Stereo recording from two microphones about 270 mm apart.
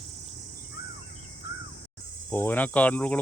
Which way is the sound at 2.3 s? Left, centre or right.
Centre.